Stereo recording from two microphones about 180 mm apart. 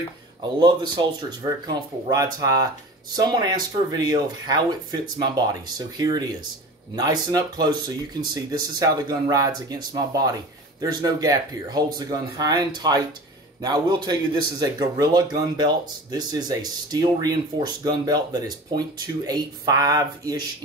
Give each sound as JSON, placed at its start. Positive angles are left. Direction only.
{"t": 0.6, "sound": "a man's voice", "side_deg": -25}